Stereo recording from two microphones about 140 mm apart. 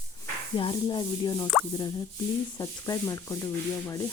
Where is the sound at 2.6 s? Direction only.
25° left (ahead or behind).